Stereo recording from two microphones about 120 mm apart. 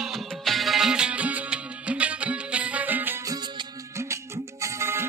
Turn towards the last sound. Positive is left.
turn(degrees=-20)  # may be behind; listen again after turning